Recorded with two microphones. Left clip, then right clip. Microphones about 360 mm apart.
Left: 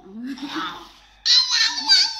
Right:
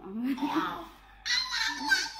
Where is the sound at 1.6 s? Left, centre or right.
Centre.